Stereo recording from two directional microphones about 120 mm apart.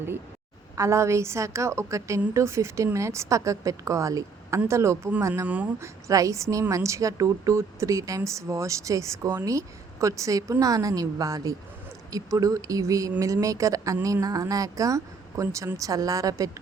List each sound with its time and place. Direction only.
0.8 s a woman's voice: 25° right (ahead or behind)
5.5 s speech: 10° right (ahead or behind)
5.8 s a woman's voice: 25° right (ahead or behind)